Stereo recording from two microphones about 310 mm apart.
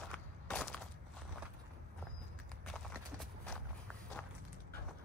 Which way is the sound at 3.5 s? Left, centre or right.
Centre.